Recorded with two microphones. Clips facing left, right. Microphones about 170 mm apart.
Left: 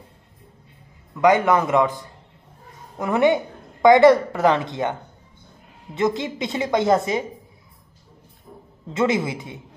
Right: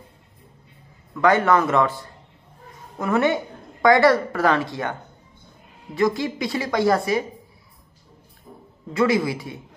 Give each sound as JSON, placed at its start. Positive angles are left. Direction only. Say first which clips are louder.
{"t": 1.2, "sound": "a man's voice", "louder": "left 1 dB", "side_deg": 15}
{"t": 3.0, "sound": "a man's voice", "louder": "left 2 dB", "side_deg": 20}
{"t": 5.9, "sound": "a woman's voice", "louder": "right 1 dB", "side_deg": 20}
{"t": 8.9, "sound": "a woman's voice", "louder": "right 1 dB", "side_deg": 20}